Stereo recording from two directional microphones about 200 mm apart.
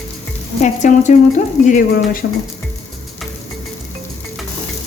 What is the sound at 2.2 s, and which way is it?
Music, 60° left (ahead or behind).